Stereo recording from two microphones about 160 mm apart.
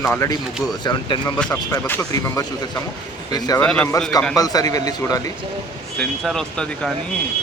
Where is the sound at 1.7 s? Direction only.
20° left (ahead or behind).